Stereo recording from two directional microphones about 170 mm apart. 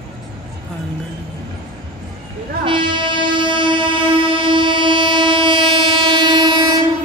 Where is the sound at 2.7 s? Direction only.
30° right (ahead or behind).